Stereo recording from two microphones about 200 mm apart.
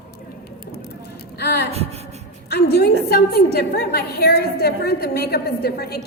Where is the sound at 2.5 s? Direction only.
55° left (ahead or behind).